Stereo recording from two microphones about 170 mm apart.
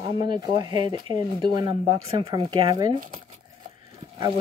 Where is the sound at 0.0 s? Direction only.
25° right (ahead or behind).